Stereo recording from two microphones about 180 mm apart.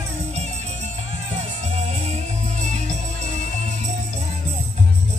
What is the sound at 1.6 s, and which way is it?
Music, 40° right (ahead or behind).